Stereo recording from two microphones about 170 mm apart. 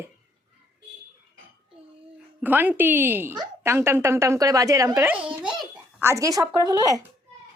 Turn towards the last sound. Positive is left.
turn(degrees=-20)  # may be behind; listen again after turning